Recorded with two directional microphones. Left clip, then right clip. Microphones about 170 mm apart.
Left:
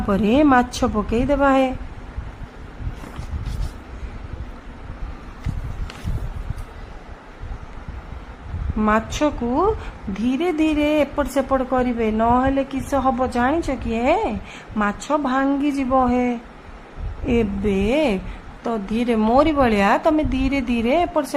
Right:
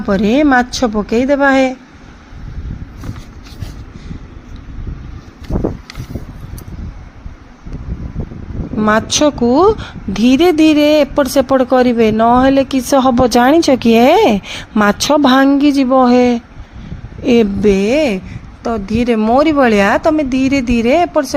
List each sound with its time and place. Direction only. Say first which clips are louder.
0.1 s a woman's voice: right 5 dB; 20° right (ahead or behind)
8.9 s speech: right 8 dB; 40° right (ahead or behind)
13.2 s a woman's voice: right 11 dB; 60° right (ahead or behind)
15.6 s speech: right 9 dB; 35° right (ahead or behind); by 16.4 s 55° right (ahead or behind)
17.6 s a woman's voice: right 8 dB; 35° right (ahead or behind)